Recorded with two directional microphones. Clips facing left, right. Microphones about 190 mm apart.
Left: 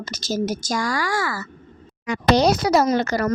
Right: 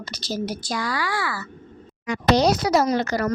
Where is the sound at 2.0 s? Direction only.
60° left (ahead or behind).